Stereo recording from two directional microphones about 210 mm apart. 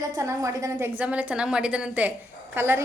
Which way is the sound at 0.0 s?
15° right (ahead or behind).